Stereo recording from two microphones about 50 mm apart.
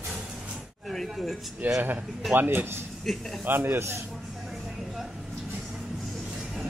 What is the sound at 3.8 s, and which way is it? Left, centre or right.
Speech, right.